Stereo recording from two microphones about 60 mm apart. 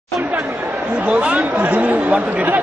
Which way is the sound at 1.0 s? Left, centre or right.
Right.